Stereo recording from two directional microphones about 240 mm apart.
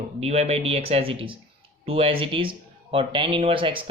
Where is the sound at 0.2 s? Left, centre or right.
Right.